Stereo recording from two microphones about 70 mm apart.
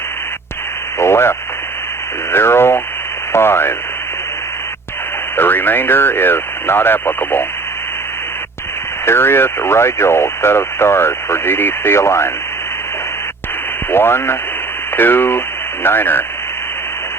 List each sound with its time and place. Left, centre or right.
0.9 s radio: left
3.3 s speech: left
5.4 s speech: left
9.0 s speech: left
13.9 s speech: left